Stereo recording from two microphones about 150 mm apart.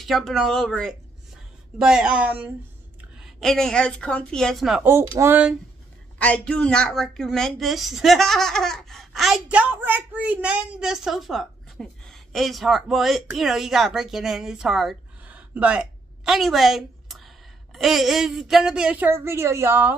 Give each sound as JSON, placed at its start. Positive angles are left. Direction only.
{"t": 0.0, "sound": "a woman's voice", "side_deg": 0}
{"t": 4.8, "sound": "a woman's voice", "side_deg": -20}
{"t": 6.1, "sound": "a woman's voice", "side_deg": 10}